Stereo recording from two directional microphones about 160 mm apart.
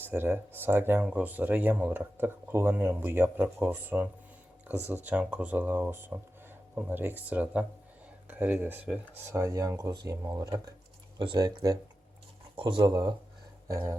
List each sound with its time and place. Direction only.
0.0 s speech: 15° right (ahead or behind)